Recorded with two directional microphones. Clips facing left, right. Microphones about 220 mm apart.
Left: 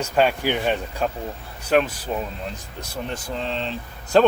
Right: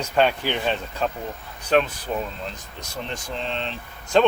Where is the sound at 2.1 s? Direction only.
Centre (ahead or behind).